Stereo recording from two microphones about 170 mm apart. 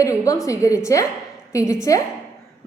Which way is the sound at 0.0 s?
20° left (ahead or behind).